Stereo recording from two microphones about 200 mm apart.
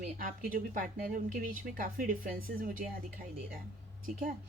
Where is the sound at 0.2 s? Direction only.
45° right (ahead or behind).